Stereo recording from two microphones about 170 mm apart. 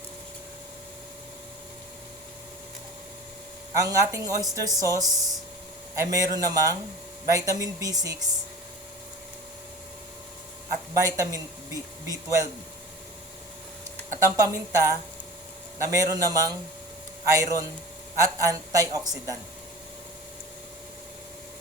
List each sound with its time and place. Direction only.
3.8 s a man's voice: 20° right (ahead or behind)
10.9 s a man's voice: 20° right (ahead or behind)
14.1 s a man's voice: 20° right (ahead or behind)